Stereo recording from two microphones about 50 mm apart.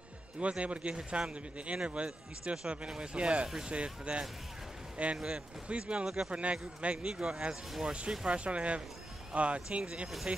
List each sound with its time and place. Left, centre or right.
0.4 s speech: right
3.4 s speech: centre
3.7 s speech: right
6.0 s speech: centre
6.3 s speech: right
8.1 s speech: centre
8.5 s speech: right